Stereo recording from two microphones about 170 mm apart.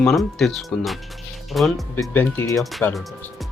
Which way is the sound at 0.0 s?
5° left (ahead or behind).